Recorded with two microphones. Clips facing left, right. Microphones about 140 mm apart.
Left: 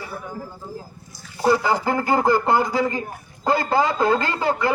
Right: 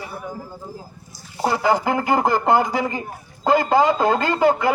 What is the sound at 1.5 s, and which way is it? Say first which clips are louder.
A man's voice: right 2 dB; 20° right (ahead or behind).